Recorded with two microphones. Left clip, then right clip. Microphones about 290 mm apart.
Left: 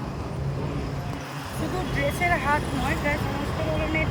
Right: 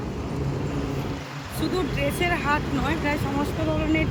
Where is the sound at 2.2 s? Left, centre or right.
Centre.